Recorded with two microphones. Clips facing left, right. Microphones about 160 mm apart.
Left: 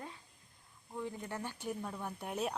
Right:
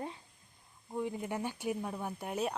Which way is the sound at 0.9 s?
15° right (ahead or behind).